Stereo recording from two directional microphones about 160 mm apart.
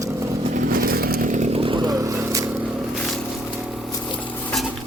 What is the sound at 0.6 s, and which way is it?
Chainsaw, 65° right (ahead or behind).